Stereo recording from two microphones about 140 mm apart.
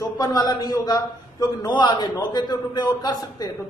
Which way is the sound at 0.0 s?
25° left (ahead or behind).